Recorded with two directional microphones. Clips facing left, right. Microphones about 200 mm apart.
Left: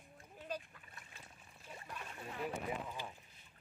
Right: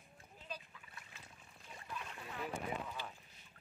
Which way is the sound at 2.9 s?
20° left (ahead or behind).